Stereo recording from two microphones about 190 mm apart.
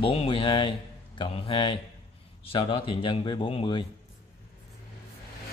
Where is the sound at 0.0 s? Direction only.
30° left (ahead or behind).